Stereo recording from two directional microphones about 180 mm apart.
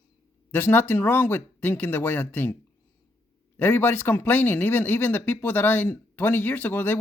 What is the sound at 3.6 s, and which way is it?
Speech, 10° left (ahead or behind).